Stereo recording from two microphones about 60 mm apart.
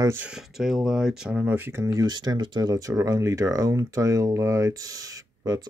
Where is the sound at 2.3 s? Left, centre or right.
Right.